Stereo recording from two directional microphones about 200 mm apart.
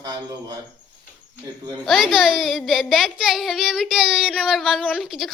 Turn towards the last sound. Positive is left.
turn(degrees=0)  # may be behind; listen again after turning